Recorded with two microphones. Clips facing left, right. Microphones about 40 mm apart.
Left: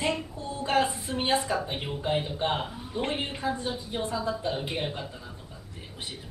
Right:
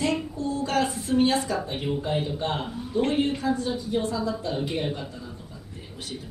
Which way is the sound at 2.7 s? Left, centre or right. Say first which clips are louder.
Right 6 dB; centre.